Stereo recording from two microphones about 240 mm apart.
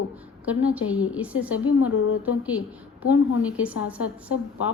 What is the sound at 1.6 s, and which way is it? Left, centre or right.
Speech, left.